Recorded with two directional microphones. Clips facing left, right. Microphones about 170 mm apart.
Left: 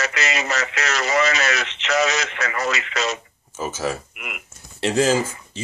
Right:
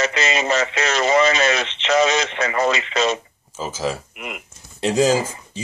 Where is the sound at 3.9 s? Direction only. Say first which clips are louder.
Right 1 dB; 25° right (ahead or behind).